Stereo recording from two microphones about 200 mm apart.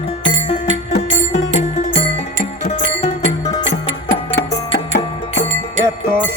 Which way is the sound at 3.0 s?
30° left (ahead or behind).